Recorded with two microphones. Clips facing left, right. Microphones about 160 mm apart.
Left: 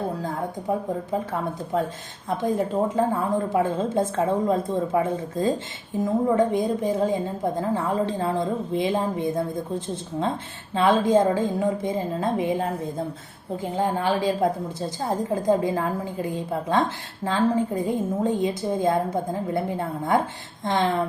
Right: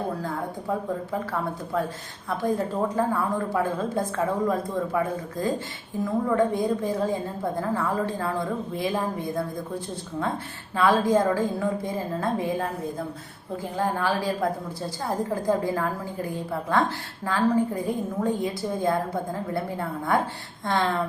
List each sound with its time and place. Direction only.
0.7 s a woman's voice: 20° left (ahead or behind)
13.7 s a woman's voice: 20° left (ahead or behind)